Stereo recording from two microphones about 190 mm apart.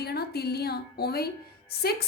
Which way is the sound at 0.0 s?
55° left (ahead or behind).